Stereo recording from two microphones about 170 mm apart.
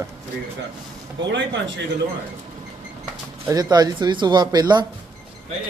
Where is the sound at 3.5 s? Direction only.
25° right (ahead or behind).